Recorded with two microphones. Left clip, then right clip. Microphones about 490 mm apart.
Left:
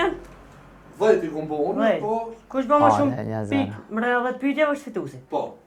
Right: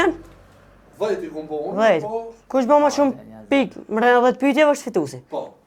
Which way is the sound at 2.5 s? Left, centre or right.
Right.